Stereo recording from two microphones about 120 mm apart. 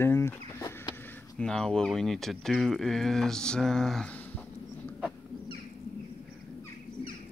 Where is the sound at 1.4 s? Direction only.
5° left (ahead or behind).